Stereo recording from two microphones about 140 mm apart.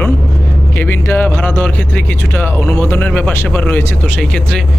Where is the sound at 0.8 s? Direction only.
15° left (ahead or behind).